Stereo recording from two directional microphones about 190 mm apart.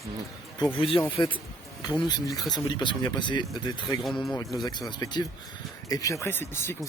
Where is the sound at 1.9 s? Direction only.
20° left (ahead or behind).